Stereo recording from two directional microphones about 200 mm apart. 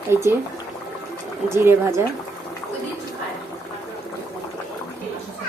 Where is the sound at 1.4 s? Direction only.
10° right (ahead or behind).